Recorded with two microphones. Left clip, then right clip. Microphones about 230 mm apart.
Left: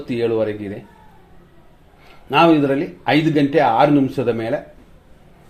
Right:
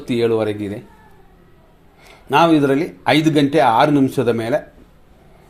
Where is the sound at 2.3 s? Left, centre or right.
Right.